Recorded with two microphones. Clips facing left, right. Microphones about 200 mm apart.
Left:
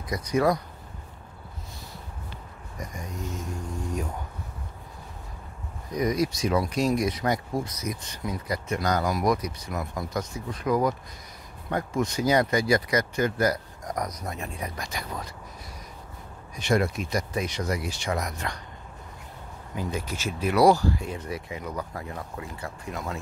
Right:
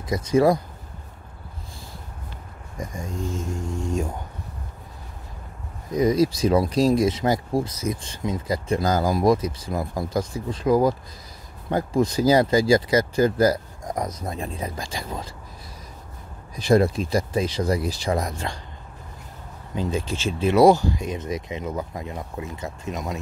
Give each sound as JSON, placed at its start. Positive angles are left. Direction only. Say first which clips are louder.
{"t": 0.1, "sound": "speech", "louder": "right 5 dB", "side_deg": -25}
{"t": 2.8, "sound": "speech", "louder": "right 5 dB", "side_deg": -30}
{"t": 5.9, "sound": "speech", "louder": "right 6 dB", "side_deg": -25}
{"t": 16.5, "sound": "speech", "louder": "right 6 dB", "side_deg": -35}
{"t": 19.7, "sound": "speech", "louder": "right 5 dB", "side_deg": -25}